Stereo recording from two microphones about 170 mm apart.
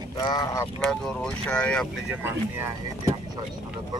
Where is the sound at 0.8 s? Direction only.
5° left (ahead or behind).